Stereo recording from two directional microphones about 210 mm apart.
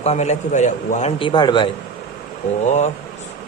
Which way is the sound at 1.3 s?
20° left (ahead or behind).